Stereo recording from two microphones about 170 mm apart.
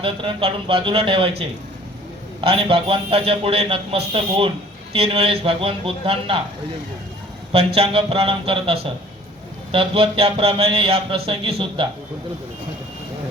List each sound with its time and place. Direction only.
0.0 s a man's voice: 30° right (ahead or behind)
2.4 s a man's voice: 30° right (ahead or behind)
7.8 s a man's voice: 35° right (ahead or behind)